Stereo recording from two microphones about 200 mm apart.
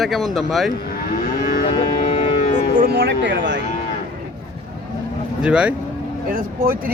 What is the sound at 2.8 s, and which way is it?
Speech, 55° right (ahead or behind).